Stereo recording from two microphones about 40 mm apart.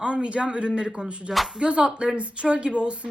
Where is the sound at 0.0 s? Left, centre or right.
Right.